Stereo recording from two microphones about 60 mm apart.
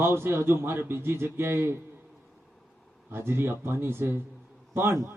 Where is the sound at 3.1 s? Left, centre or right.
Right.